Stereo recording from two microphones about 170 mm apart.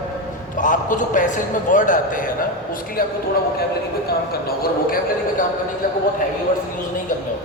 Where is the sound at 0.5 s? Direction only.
50° left (ahead or behind).